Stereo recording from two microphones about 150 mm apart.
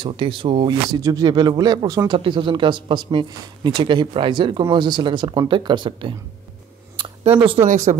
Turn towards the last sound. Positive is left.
turn(degrees=-55)  # may be behind; listen again after turning